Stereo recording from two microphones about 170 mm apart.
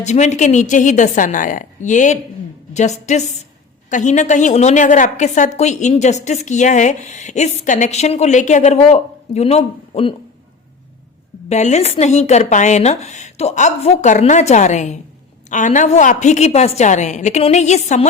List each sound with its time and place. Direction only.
0.0 s a woman's voice: 45° left (ahead or behind)
11.4 s a woman's voice: 40° left (ahead or behind)